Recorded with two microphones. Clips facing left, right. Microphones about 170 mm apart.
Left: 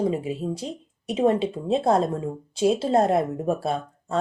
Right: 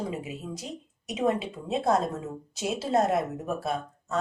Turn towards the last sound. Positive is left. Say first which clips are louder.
# left 4 dB
turn(degrees=30)  # may be behind; listen again after turning